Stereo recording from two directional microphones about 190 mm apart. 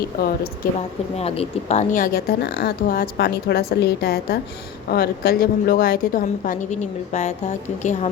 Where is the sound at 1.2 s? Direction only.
35° left (ahead or behind).